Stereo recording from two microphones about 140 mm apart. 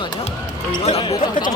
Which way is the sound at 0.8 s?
45° left (ahead or behind).